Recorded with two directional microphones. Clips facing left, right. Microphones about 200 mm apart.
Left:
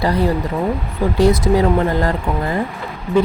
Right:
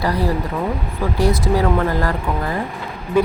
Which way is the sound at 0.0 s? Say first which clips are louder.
Left 3 dB; 25° left (ahead or behind).